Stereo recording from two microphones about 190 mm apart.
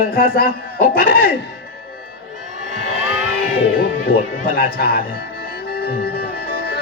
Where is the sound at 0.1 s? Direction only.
50° left (ahead or behind).